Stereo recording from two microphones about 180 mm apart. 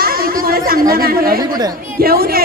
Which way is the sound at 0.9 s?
55° right (ahead or behind).